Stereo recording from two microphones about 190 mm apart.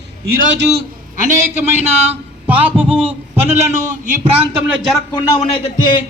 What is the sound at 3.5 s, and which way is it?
Speech, 40° right (ahead or behind).